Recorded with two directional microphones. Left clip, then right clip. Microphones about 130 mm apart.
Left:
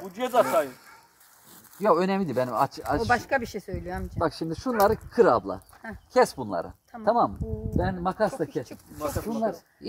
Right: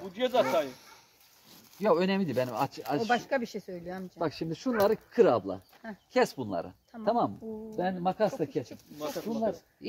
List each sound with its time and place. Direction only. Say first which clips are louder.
0.1 s speech: left 4 dB; 5° left (ahead or behind)
1.8 s speech: left 4 dB; 5° right (ahead or behind)
3.1 s speech: left 4 dB; 90° left
4.2 s speech: left 5 dB; 20° right (ahead or behind)
5.8 s speech: left 5 dB; 90° left
6.1 s speech: left 5 dB; 20° right (ahead or behind)
8.9 s speech: left 5 dB; 15° right (ahead or behind)